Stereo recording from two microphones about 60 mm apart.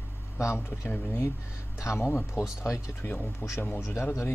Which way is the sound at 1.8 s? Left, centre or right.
Left.